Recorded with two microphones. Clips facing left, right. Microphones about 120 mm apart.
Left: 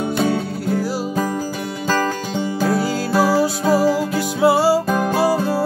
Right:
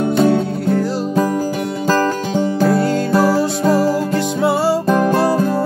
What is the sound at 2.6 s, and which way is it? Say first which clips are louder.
Music: right 3 dB; centre (ahead or behind).